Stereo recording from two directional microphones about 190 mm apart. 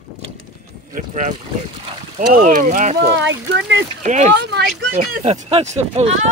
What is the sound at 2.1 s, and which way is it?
Speech, 40° right (ahead or behind).